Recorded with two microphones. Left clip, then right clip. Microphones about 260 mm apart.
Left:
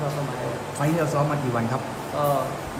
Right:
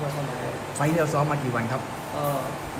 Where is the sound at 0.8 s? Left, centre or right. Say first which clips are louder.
Right 1 dB; centre.